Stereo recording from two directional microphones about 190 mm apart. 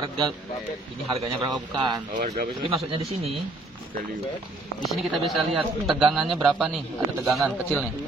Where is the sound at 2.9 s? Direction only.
30° right (ahead or behind).